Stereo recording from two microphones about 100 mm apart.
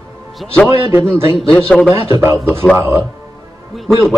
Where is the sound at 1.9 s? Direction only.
25° right (ahead or behind).